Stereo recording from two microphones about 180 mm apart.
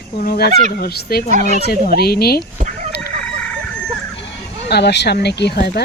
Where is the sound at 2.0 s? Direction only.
60° left (ahead or behind).